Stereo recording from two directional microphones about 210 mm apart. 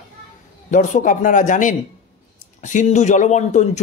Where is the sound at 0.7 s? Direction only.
35° left (ahead or behind).